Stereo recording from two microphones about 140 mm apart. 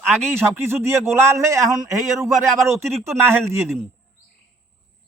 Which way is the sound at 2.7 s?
20° right (ahead or behind).